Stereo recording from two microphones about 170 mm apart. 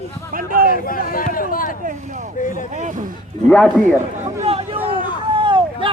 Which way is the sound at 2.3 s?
50° left (ahead or behind).